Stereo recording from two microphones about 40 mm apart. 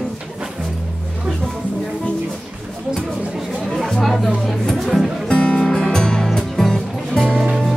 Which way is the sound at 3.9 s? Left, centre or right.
Centre.